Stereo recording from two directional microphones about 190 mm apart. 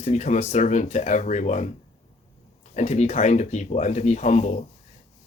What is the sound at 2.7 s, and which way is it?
Speech, 35° left (ahead or behind).